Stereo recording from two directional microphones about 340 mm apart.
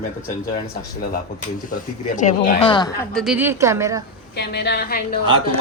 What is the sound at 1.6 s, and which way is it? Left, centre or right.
Speech, left.